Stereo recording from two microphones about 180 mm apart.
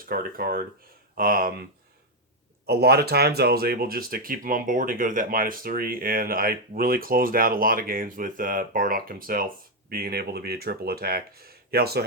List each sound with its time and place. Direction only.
0.0 s speech: 55° right (ahead or behind)
2.6 s speech: 65° right (ahead or behind)